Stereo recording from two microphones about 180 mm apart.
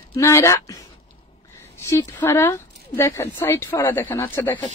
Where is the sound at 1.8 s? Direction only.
20° left (ahead or behind).